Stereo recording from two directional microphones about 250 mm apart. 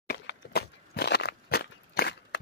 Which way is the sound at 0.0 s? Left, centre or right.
Left.